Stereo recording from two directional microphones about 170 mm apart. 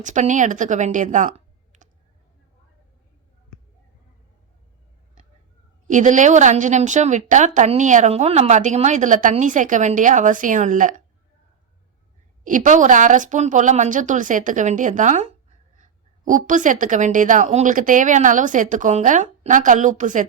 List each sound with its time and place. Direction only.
0.0 s a woman's voice: 45° right (ahead or behind)
5.9 s a woman's voice: 50° right (ahead or behind)
12.5 s a woman's voice: 50° right (ahead or behind)